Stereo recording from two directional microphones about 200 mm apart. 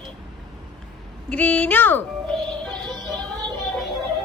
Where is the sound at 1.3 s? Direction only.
10° left (ahead or behind).